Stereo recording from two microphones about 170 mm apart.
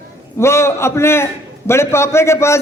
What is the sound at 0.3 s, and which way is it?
A man's voice, 15° left (ahead or behind).